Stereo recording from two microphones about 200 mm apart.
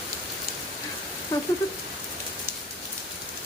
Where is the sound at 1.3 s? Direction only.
20° left (ahead or behind).